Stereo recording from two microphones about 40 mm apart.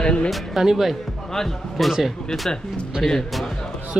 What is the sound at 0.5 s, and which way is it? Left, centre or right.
Speech, centre.